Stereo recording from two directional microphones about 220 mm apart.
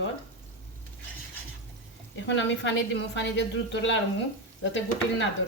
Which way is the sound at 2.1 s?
55° left (ahead or behind).